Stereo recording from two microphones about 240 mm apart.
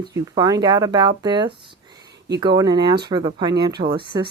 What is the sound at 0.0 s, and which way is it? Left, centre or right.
A woman's voice, centre.